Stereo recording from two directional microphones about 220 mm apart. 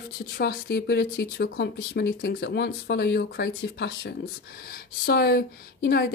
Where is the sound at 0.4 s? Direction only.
45° left (ahead or behind).